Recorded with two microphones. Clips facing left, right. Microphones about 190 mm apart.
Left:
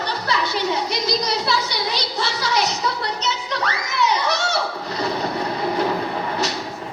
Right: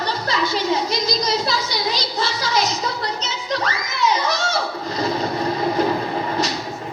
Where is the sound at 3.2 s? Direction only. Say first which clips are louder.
Even; 65° left (ahead or behind).